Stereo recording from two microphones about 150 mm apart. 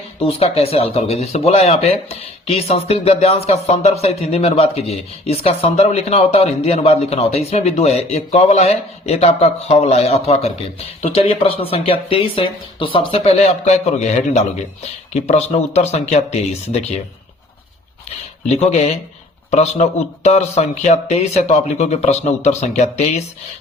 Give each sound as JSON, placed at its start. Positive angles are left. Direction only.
{"t": 0.2, "sound": "speech", "side_deg": 40}
{"t": 18.4, "sound": "speech", "side_deg": 45}